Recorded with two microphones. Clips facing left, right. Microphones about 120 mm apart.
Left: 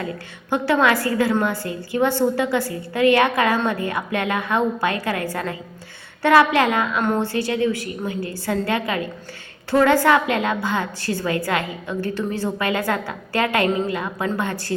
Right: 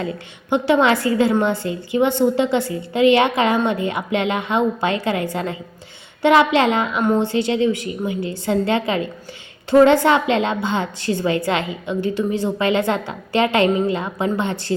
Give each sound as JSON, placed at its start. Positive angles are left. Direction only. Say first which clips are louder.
{"t": 0.5, "sound": "a woman's voice", "louder": "right 2 dB", "side_deg": -20}
{"t": 7.0, "sound": "a woman's voice", "louder": "right 6 dB", "side_deg": -10}
{"t": 7.3, "sound": "a woman's voice", "louder": "right 3 dB", "side_deg": -20}